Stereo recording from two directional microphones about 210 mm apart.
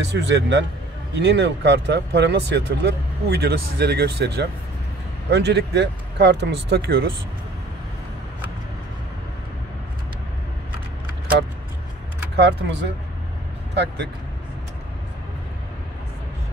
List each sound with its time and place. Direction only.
0.0 s speech: 60° right (ahead or behind)
12.4 s speech: 55° right (ahead or behind)